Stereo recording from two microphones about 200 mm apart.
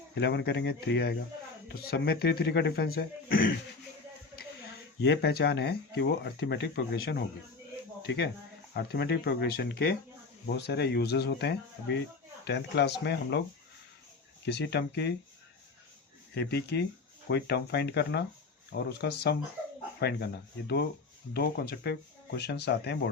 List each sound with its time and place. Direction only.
0.1 s speech: 60° left (ahead or behind)
4.9 s speech: 60° left (ahead or behind)
14.4 s speech: 60° left (ahead or behind)
16.3 s speech: 55° left (ahead or behind)